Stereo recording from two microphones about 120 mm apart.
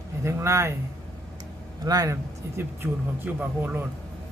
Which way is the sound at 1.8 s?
30° right (ahead or behind).